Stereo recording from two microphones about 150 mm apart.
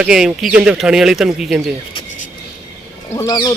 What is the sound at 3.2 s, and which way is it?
Speech, 30° left (ahead or behind).